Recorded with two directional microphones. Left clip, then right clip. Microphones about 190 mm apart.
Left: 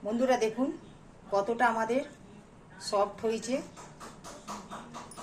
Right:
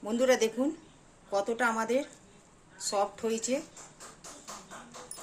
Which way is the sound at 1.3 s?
35° right (ahead or behind).